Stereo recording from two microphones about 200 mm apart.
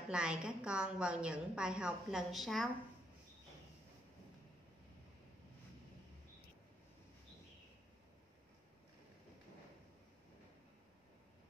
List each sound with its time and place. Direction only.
0.1 s a woman's voice: 5° right (ahead or behind)